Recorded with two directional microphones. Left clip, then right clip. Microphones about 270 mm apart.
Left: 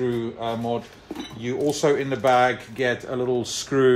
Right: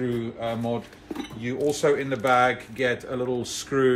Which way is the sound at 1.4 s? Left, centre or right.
Centre.